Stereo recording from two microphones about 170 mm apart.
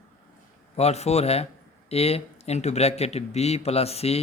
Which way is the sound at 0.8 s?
40° left (ahead or behind).